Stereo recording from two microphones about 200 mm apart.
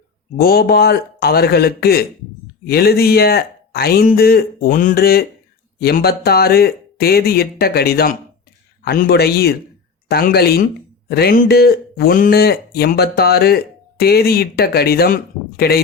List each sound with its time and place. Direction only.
0.3 s a man's voice: 50° left (ahead or behind)